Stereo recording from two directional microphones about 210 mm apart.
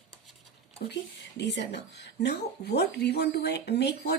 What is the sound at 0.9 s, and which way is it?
Speech, 55° left (ahead or behind).